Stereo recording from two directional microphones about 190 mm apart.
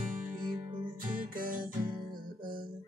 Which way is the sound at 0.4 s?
20° right (ahead or behind).